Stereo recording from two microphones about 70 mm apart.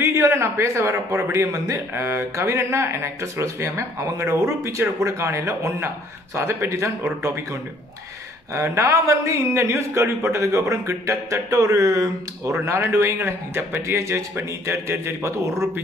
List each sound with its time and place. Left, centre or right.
0.0 s a man's voice: right
8.5 s a man's voice: right